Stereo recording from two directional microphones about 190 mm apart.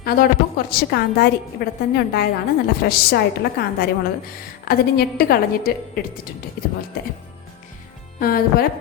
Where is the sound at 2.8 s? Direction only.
60° left (ahead or behind).